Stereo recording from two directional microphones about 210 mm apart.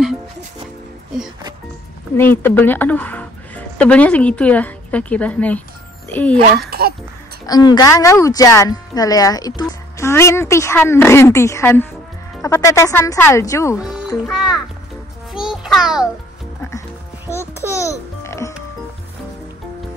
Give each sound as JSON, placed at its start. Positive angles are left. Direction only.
{"t": 2.1, "sound": "speech", "side_deg": 10}
{"t": 6.7, "sound": "speech", "side_deg": -45}
{"t": 7.4, "sound": "speech", "side_deg": 20}
{"t": 13.7, "sound": "a child's voice", "side_deg": 0}
{"t": 15.3, "sound": "music", "side_deg": -5}
{"t": 17.3, "sound": "music", "side_deg": 10}